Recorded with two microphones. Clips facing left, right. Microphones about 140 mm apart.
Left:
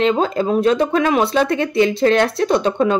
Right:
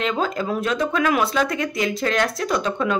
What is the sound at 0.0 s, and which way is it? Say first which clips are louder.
Speech: left 7 dB; 30° left (ahead or behind).